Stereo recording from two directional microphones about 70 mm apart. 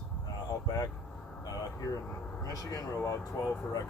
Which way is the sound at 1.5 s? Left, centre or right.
Left.